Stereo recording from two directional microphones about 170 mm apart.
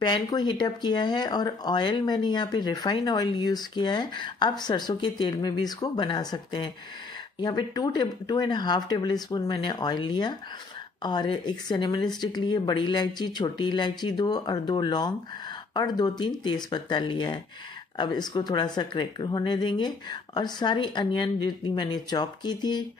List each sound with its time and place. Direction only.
0.0 s speech: 25° left (ahead or behind)